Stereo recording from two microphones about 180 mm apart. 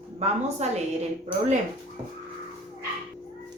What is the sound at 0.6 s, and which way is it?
Speech, 40° right (ahead or behind).